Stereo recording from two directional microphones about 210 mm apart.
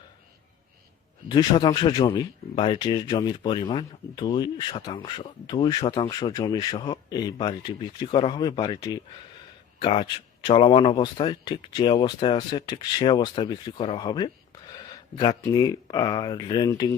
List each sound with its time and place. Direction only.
1.3 s speech: 20° left (ahead or behind)